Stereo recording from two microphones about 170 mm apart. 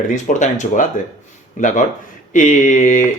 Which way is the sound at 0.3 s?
45° left (ahead or behind).